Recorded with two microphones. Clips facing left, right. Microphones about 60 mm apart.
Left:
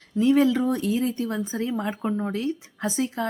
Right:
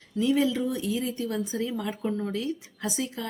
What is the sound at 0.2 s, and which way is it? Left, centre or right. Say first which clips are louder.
Speech: left 5 dB; left.